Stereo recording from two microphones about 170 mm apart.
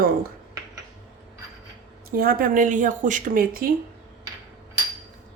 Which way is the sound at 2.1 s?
60° right (ahead or behind).